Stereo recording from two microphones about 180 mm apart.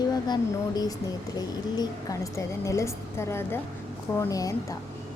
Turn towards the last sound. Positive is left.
turn(degrees=20)  # may be behind; listen again after turning